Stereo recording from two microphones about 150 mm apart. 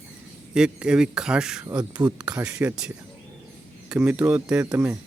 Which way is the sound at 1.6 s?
25° right (ahead or behind).